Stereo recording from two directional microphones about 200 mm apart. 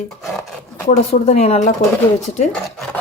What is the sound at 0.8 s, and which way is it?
Speech, 30° left (ahead or behind).